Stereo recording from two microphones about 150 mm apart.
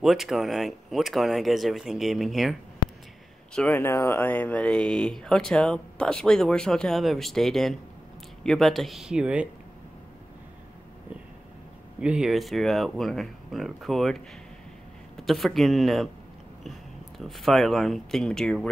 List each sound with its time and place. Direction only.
0.0 s speech: centre (ahead or behind)
3.5 s speech: 10° left (ahead or behind); by 9.5 s 5° right (ahead or behind)
12.0 s speech: 5° right (ahead or behind)
15.1 s speech: centre (ahead or behind)
17.2 s speech: centre (ahead or behind)